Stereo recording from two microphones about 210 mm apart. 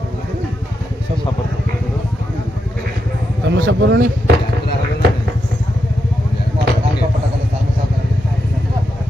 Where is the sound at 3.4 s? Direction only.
60° right (ahead or behind).